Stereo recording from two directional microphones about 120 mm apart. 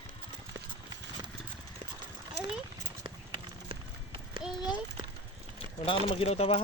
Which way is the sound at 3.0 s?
45° right (ahead or behind).